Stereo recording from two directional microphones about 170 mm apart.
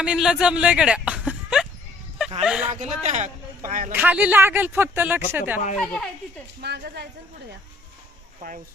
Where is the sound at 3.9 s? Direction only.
10° right (ahead or behind).